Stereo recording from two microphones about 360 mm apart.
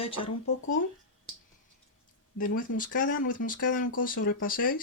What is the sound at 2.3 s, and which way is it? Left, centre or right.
Speech, left.